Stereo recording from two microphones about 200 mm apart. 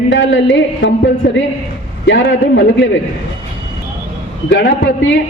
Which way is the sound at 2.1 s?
65° left (ahead or behind).